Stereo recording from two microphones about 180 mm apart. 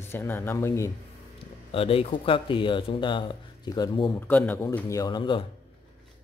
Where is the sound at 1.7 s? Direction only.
30° left (ahead or behind).